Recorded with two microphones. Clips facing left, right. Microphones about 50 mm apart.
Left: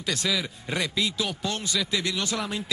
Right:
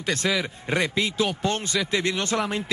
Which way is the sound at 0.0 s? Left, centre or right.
Right.